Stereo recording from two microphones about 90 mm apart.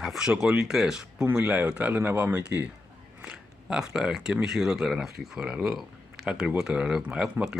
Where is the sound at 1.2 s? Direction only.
20° right (ahead or behind).